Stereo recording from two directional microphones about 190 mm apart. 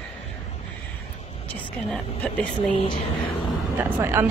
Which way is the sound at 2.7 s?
25° left (ahead or behind).